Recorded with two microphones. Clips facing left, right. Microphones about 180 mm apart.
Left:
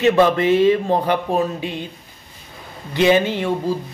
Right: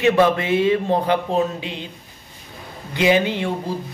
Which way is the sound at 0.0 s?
15° right (ahead or behind).